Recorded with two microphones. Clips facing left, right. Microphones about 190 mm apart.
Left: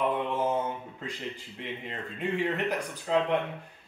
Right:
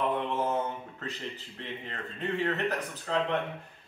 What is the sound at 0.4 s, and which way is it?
Speech, 15° left (ahead or behind).